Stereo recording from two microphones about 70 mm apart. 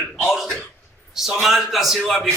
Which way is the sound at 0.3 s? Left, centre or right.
Centre.